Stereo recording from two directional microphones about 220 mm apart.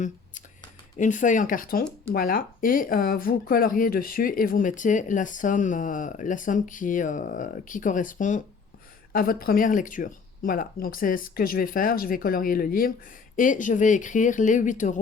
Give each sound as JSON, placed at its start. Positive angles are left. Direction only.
{"t": 0.9, "sound": "speech", "side_deg": 35}